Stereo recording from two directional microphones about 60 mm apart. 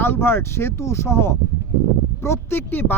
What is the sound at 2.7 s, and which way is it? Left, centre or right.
Speech, left.